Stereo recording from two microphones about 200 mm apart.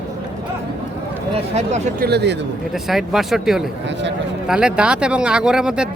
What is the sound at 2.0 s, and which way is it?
Speech, 55° right (ahead or behind).